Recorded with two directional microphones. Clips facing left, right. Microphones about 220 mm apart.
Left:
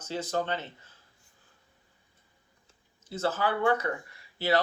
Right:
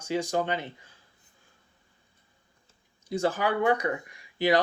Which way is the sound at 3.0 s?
15° right (ahead or behind).